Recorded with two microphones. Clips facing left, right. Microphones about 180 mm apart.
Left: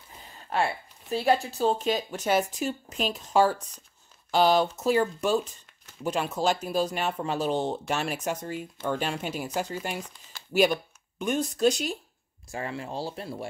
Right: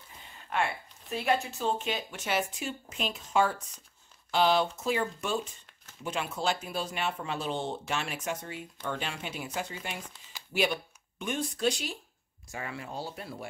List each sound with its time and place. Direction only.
0.5 s speech: 35° left (ahead or behind)